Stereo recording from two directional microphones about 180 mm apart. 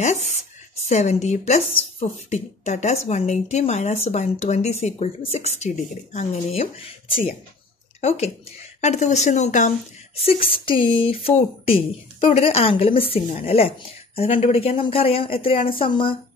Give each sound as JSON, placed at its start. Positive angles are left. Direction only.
{"t": 0.0, "sound": "speech", "side_deg": 40}